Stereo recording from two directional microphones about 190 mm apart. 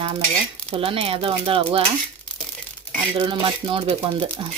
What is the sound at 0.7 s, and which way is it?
Cutlery, 30° right (ahead or behind).